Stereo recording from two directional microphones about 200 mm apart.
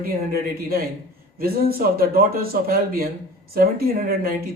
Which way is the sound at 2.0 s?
45° right (ahead or behind).